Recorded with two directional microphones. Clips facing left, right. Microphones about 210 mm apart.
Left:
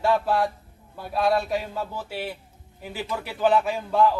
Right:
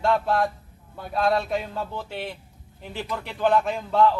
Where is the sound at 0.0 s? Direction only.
5° left (ahead or behind).